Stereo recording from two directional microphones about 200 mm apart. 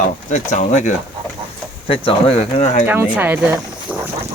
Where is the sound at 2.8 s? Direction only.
10° right (ahead or behind).